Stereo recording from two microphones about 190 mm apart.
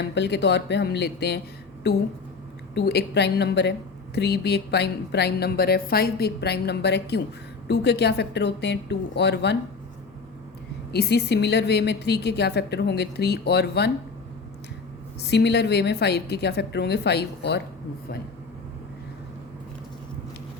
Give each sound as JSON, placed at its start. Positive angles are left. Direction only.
{"t": 0.0, "sound": "a woman's voice", "side_deg": 65}
{"t": 10.9, "sound": "a woman's voice", "side_deg": 60}
{"t": 15.2, "sound": "a woman's voice", "side_deg": 60}